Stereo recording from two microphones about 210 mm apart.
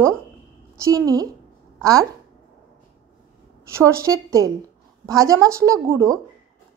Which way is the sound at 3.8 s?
15° right (ahead or behind).